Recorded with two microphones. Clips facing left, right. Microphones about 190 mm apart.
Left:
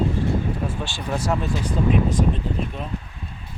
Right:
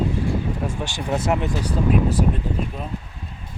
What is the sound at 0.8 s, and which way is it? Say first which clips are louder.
Speech: right 2 dB; 20° right (ahead or behind).